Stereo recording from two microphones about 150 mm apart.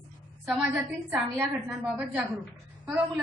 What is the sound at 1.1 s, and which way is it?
A woman's voice, 10° right (ahead or behind).